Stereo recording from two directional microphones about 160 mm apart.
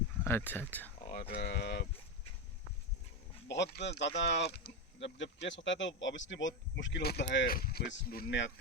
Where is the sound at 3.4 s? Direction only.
90° left.